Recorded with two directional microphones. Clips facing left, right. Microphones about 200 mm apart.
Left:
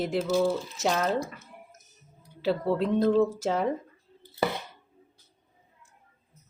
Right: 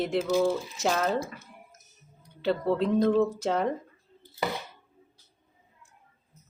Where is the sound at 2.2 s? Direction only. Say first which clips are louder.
Even; centre (ahead or behind).